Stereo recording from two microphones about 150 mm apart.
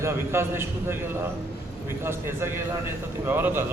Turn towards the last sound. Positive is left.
turn(degrees=-15)  # may be behind; listen again after turning